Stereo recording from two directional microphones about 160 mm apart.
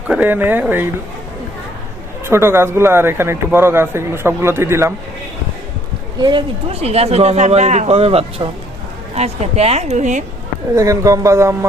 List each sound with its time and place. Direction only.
0.1 s a man's voice: 10° right (ahead or behind)
2.2 s a man's voice: 15° right (ahead or behind)
6.1 s speech: 25° right (ahead or behind)
6.7 s a woman's voice: 40° right (ahead or behind)
10.8 s speech: 20° right (ahead or behind)